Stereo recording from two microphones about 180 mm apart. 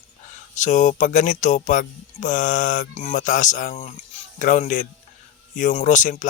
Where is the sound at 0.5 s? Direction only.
45° left (ahead or behind).